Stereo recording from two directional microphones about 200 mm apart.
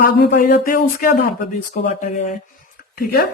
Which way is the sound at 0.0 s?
50° left (ahead or behind).